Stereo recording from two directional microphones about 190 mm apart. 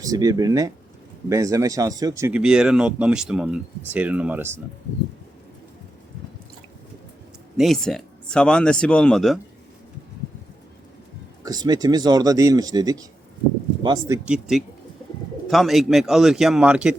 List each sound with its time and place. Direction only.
0.0 s speech: 20° right (ahead or behind)
2.4 s speech: 5° right (ahead or behind)
7.5 s speech: centre (ahead or behind)
11.4 s speech: 20° right (ahead or behind)
14.3 s speech: 5° right (ahead or behind)